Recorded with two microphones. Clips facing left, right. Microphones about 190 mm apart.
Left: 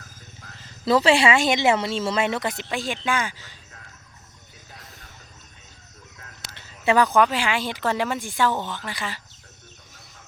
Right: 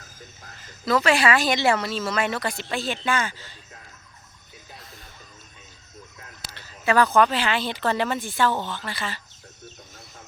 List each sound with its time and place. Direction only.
0.6 s a woman's voice: 30° left (ahead or behind)
6.5 s speech: 20° left (ahead or behind)